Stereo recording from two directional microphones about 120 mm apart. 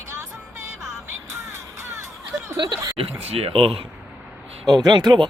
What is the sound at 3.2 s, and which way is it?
Speech, 55° right (ahead or behind).